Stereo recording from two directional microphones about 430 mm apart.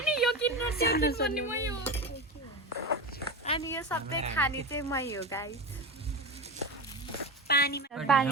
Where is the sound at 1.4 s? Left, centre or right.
Centre.